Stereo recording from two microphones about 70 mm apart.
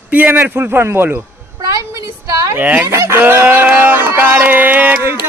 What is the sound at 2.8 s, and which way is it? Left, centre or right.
Speech, right.